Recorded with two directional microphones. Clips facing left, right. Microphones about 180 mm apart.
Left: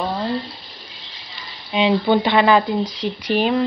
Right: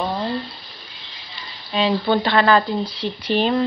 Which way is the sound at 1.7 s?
15° left (ahead or behind).